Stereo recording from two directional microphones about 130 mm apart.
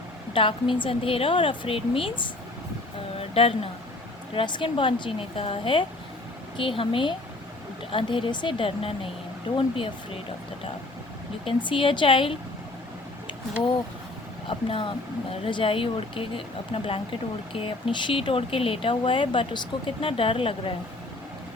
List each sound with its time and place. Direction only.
0.3 s speech: 40° left (ahead or behind)
3.2 s a sound: 50° left (ahead or behind)
4.4 s speech: 40° left (ahead or behind)
11.4 s speech: 40° left (ahead or behind)
15.3 s speech: 40° left (ahead or behind)